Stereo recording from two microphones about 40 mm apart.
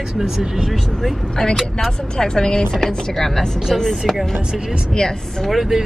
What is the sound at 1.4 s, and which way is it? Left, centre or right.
Speech, centre.